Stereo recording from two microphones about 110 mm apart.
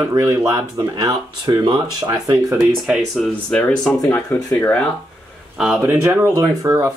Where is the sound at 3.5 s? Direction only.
10° left (ahead or behind).